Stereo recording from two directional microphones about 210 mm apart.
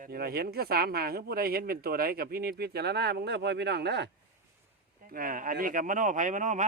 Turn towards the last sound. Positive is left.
turn(degrees=-35)  # may be behind; listen again after turning